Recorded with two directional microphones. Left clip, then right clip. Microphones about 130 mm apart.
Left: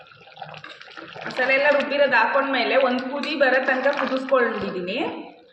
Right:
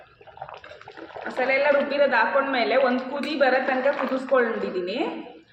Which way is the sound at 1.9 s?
20° right (ahead or behind).